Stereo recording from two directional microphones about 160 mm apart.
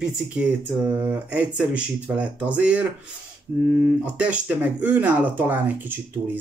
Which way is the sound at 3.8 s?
10° right (ahead or behind).